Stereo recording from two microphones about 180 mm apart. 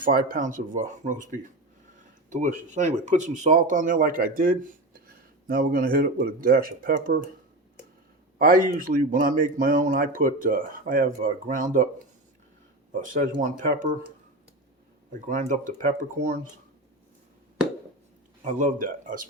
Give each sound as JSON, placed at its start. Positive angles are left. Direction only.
{"t": 0.0, "sound": "speech", "side_deg": -50}
{"t": 8.4, "sound": "speech", "side_deg": -55}
{"t": 12.9, "sound": "speech", "side_deg": -45}
{"t": 15.3, "sound": "speech", "side_deg": -45}
{"t": 18.6, "sound": "speech", "side_deg": -45}